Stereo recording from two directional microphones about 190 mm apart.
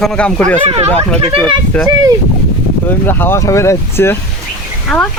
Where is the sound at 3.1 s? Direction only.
10° left (ahead or behind).